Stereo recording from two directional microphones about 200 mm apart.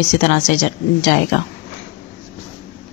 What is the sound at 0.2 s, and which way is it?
A woman's voice, 35° left (ahead or behind).